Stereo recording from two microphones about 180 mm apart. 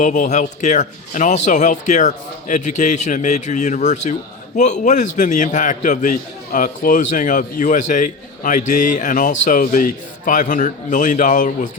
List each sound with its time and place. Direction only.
0.0 s a man's voice: 45° left (ahead or behind)